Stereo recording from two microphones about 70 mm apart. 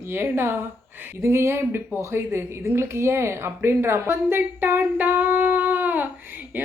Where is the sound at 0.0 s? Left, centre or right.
Right.